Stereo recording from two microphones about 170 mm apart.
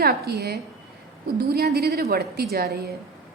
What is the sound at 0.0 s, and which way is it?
A woman's voice, 65° right (ahead or behind).